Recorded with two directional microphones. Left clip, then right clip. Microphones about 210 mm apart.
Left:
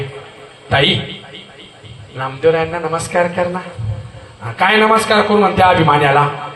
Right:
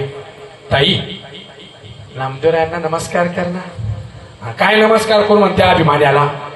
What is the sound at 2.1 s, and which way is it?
A man's voice, 20° left (ahead or behind).